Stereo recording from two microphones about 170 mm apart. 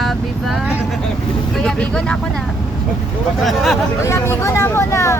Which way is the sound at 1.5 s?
5° left (ahead or behind).